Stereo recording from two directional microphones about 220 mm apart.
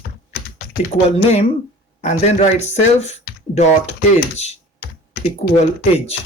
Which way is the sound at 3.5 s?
30° left (ahead or behind).